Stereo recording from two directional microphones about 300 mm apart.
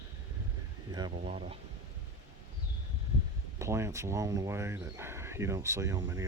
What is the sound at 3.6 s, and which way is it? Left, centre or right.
Speech, centre.